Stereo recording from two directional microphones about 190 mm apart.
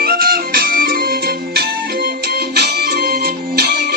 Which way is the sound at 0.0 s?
50° right (ahead or behind).